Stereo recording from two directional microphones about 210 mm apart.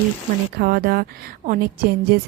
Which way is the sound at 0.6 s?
45° right (ahead or behind).